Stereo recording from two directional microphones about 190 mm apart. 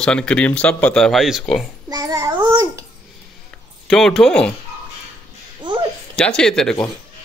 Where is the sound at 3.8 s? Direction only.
Centre (ahead or behind).